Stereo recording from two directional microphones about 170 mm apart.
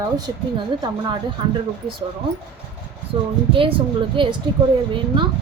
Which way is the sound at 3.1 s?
30° right (ahead or behind).